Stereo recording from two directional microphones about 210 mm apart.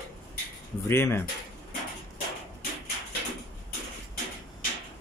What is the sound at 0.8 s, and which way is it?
Speech, 10° left (ahead or behind).